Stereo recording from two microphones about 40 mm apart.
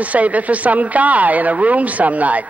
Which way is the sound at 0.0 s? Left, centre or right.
Right.